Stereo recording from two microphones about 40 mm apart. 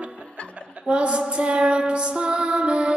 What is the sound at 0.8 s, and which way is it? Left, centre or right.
Female singing, right.